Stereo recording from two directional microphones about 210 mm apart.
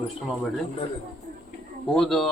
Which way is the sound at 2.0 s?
Centre (ahead or behind).